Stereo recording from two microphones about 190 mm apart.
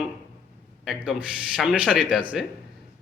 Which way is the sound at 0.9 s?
5° right (ahead or behind).